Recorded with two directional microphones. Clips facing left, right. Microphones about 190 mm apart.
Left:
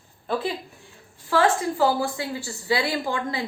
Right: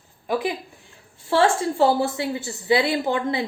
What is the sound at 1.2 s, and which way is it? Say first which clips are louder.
A woman's voice: right 2 dB; 30° right (ahead or behind).